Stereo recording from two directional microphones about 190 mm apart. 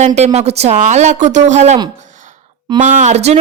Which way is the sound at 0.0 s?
35° right (ahead or behind).